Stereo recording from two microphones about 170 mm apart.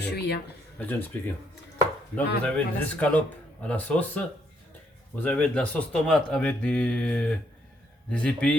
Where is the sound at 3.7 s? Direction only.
10° left (ahead or behind).